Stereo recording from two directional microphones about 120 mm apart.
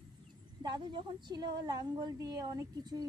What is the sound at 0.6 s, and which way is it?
A woman's voice, 35° right (ahead or behind).